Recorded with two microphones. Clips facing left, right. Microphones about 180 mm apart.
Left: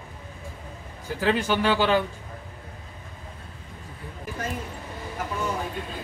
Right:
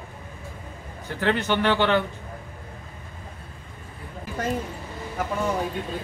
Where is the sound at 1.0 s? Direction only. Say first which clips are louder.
Even; 10° left (ahead or behind).